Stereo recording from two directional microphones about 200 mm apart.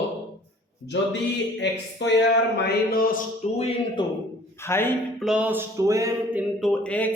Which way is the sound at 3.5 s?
30° left (ahead or behind).